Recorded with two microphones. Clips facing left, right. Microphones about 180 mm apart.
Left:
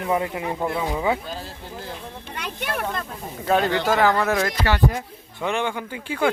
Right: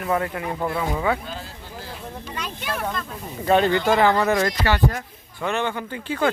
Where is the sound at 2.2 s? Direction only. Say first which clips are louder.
Left 3 dB; 60° left (ahead or behind).